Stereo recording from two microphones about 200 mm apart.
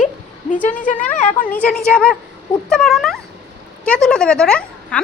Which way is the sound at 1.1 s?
35° left (ahead or behind).